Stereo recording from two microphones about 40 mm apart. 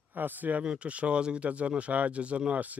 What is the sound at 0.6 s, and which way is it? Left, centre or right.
Speech, right.